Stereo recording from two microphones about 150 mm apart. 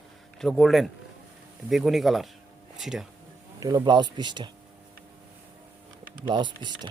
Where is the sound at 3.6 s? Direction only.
30° right (ahead or behind).